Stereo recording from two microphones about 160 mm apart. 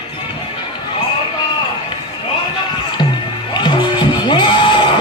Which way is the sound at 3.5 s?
30° left (ahead or behind).